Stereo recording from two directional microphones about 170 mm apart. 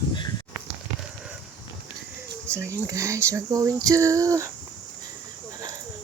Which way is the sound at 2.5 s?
15° right (ahead or behind).